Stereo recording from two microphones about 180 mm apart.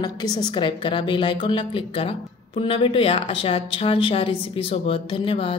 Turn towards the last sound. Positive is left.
turn(degrees=30)  # may be behind; listen again after turning